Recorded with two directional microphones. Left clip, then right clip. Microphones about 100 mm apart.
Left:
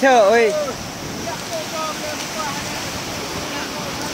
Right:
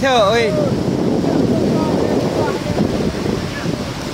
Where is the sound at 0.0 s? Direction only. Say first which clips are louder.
Left 1 dB; 20° left (ahead or behind).